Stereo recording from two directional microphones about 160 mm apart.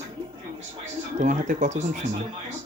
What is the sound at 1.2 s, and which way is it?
Speech, 50° right (ahead or behind).